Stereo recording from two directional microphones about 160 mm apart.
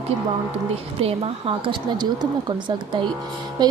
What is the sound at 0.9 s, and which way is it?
A woman's voice, 40° right (ahead or behind).